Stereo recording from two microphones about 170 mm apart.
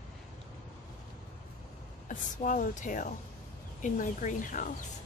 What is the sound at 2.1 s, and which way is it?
Speech, 50° left (ahead or behind).